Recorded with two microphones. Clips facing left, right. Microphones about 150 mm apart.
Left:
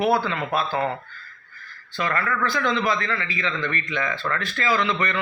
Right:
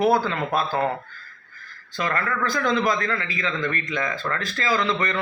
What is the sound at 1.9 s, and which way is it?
A man's voice, 40° right (ahead or behind).